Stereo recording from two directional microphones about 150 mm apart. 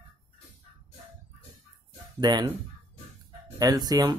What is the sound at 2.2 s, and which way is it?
Speech, 30° right (ahead or behind).